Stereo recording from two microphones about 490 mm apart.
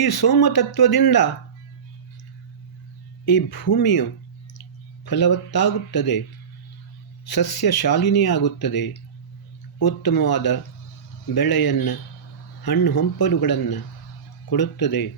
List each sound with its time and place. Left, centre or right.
0.0 s speech: left
3.2 s speech: left
5.0 s speech: left
7.3 s speech: left